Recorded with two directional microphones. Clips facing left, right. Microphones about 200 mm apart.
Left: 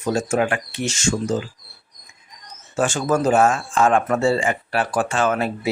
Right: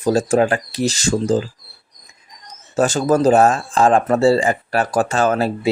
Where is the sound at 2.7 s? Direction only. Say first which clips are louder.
Right 4 dB; 40° right (ahead or behind).